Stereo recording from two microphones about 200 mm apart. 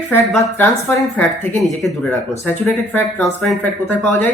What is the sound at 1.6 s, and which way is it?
Speech, centre (ahead or behind).